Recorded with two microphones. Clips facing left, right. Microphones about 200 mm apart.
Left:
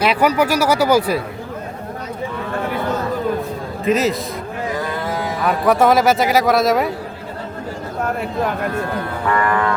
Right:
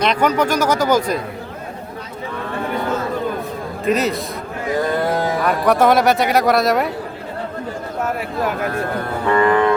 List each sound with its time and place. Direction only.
0.0 s speech: 5° left (ahead or behind)
3.8 s speech: centre (ahead or behind)
5.4 s speech: centre (ahead or behind)
8.2 s speech: 5° right (ahead or behind)
9.3 s music: 20° right (ahead or behind)